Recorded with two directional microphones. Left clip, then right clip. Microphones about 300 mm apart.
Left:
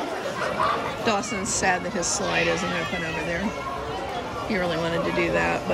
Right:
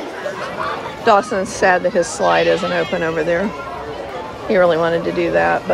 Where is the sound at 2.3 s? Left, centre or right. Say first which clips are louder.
Right 9 dB; centre.